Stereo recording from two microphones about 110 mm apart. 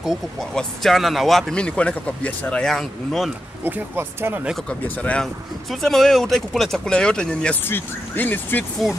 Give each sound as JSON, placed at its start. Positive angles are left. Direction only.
{"t": 0.0, "sound": "speech", "side_deg": 0}
{"t": 3.6, "sound": "speech", "side_deg": -20}
{"t": 4.6, "sound": "speech", "side_deg": 10}
{"t": 7.6, "sound": "speech", "side_deg": 20}